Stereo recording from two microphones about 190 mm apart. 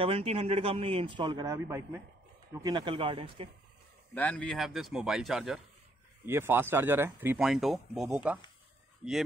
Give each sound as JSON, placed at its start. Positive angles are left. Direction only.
{"t": 0.0, "sound": "a man's voice", "side_deg": -30}
{"t": 4.1, "sound": "a man's voice", "side_deg": 5}
{"t": 6.2, "sound": "speech", "side_deg": -10}